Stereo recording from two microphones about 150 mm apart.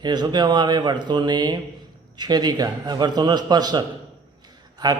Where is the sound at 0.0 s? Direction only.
30° right (ahead or behind).